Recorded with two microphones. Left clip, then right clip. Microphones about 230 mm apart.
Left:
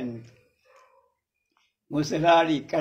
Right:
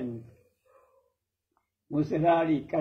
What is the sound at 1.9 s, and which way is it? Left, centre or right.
Speech, left.